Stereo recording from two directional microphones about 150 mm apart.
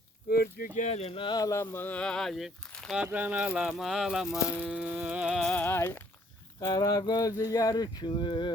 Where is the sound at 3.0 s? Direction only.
10° right (ahead or behind).